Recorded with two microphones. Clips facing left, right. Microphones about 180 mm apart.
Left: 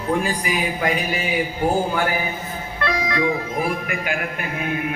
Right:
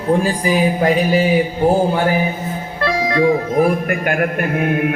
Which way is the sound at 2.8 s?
35° right (ahead or behind).